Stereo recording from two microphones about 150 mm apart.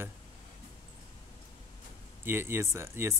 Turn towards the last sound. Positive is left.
turn(degrees=-15)  # may be behind; listen again after turning